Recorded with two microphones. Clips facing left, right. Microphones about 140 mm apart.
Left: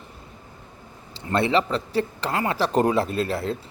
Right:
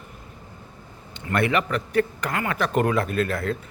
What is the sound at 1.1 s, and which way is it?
A man's voice, 30° left (ahead or behind).